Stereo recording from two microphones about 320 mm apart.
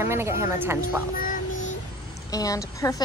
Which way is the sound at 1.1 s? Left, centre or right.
Left.